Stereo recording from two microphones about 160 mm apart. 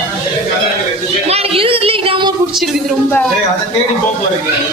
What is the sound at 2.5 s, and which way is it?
Speech, centre (ahead or behind).